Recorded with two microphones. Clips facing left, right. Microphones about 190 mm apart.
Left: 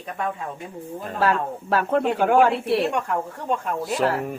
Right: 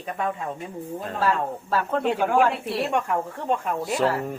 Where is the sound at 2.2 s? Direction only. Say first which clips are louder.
Left 4 dB; 65° left (ahead or behind).